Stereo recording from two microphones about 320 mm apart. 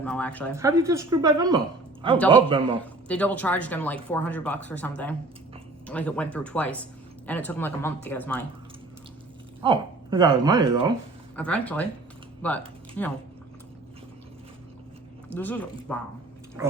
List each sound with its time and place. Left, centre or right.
0.0 s speech: centre
0.5 s a woman's voice: centre
3.1 s speech: centre
9.6 s speech: centre
11.3 s speech: centre
15.3 s speech: centre